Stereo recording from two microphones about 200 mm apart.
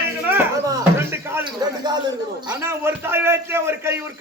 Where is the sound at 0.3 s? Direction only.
10° right (ahead or behind).